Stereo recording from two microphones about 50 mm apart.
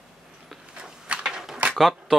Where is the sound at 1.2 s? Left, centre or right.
Centre.